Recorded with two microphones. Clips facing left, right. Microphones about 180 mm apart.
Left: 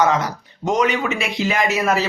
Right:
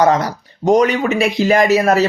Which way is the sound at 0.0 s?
35° right (ahead or behind).